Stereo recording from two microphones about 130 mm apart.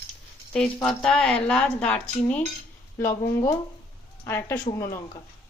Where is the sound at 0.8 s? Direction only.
5° left (ahead or behind).